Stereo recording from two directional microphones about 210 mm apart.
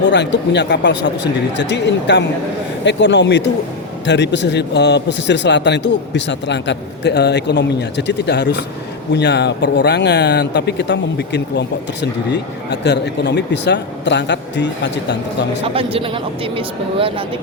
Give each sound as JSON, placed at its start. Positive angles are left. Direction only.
{"t": 0.1, "sound": "speech", "side_deg": 55}
{"t": 15.6, "sound": "speech", "side_deg": -25}